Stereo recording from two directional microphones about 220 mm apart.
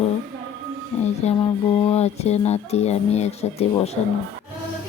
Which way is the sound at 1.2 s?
30° left (ahead or behind).